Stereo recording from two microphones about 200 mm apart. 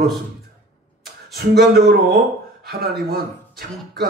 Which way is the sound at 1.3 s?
50° right (ahead or behind).